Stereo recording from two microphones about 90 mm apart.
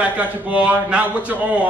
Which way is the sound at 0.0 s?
15° right (ahead or behind).